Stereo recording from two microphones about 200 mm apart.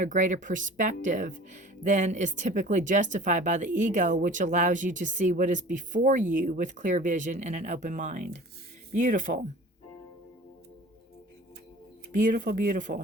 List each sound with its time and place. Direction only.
0.0 s speech: 40° right (ahead or behind)
12.1 s speech: 40° right (ahead or behind)